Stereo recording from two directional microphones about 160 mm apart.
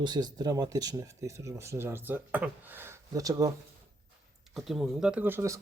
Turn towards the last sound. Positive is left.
turn(degrees=-20)  # may be behind; listen again after turning